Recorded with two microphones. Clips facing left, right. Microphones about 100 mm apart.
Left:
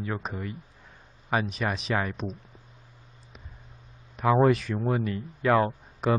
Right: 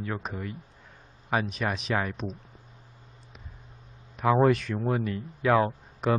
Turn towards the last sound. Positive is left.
turn(degrees=0)  # may be behind; listen again after turning